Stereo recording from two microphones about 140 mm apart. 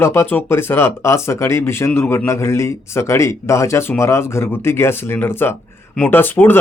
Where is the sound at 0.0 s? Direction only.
15° left (ahead or behind).